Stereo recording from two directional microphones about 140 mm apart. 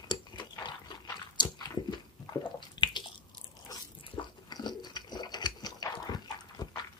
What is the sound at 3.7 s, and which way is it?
Dog, 30° left (ahead or behind).